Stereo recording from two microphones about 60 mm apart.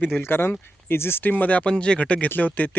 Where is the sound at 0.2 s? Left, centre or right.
Left.